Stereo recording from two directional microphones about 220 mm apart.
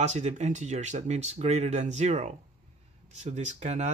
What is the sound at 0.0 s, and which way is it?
Speech, 30° right (ahead or behind).